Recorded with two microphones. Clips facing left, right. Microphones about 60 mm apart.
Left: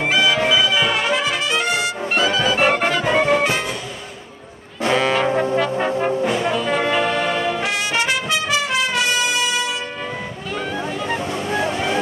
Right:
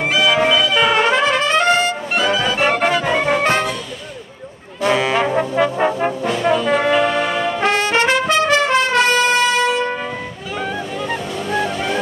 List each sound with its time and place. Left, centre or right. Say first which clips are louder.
0.0 s music: right 2 dB; centre
0.9 s trumpet: right 5 dB; right
2.1 s music: even; centre
4.8 s brass instrument: right 1 dB; centre
6.2 s brass instrument: right 3 dB; centre
7.6 s trumpet: right 5 dB; right
11.1 s music: right 1 dB; centre